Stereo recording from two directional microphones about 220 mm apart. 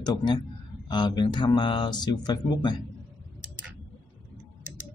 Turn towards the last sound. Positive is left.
turn(degrees=-5)  # may be behind; listen again after turning